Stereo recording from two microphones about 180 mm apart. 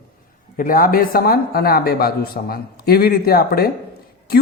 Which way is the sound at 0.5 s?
50° left (ahead or behind).